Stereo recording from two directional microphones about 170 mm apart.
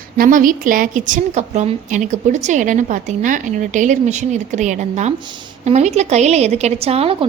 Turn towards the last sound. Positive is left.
turn(degrees=-35)  # may be behind; listen again after turning